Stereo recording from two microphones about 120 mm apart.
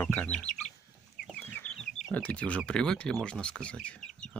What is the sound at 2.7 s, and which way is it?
Speech, 5° left (ahead or behind).